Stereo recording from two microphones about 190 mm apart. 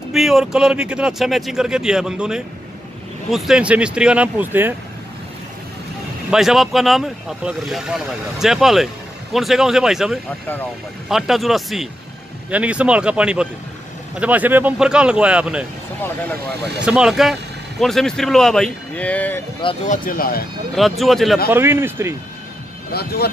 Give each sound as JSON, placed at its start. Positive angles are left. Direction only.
{"t": 0.1, "sound": "speech", "side_deg": 0}
{"t": 6.3, "sound": "speech", "side_deg": 0}
{"t": 16.8, "sound": "speech", "side_deg": -5}
{"t": 19.6, "sound": "speech", "side_deg": 35}
{"t": 21.0, "sound": "speech", "side_deg": 0}
{"t": 21.5, "sound": "speech", "side_deg": -10}
{"t": 22.9, "sound": "speech", "side_deg": 55}